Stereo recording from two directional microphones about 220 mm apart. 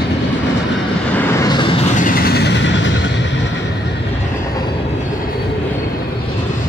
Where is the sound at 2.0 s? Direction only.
40° left (ahead or behind).